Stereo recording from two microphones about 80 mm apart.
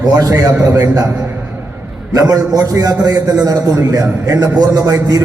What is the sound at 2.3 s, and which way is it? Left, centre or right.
A man's voice, right.